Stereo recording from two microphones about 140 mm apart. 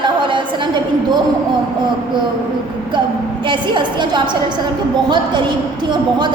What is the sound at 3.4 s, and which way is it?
Speech, 35° right (ahead or behind).